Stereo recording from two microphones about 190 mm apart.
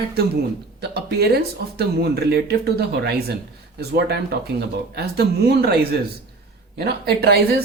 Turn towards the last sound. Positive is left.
turn(degrees=-55)  # may be behind; listen again after turning